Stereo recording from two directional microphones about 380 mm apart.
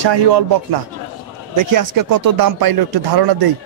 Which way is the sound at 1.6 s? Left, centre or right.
Right.